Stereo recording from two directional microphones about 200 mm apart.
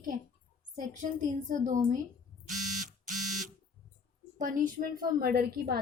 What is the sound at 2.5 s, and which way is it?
Buzzer, 40° right (ahead or behind).